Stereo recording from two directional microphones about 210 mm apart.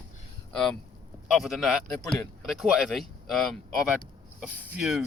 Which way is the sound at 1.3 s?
Centre (ahead or behind).